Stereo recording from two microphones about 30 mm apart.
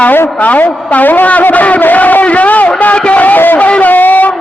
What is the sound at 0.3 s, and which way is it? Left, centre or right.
Music, left.